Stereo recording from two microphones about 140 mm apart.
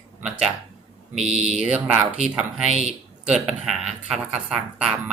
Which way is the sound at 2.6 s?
50° right (ahead or behind).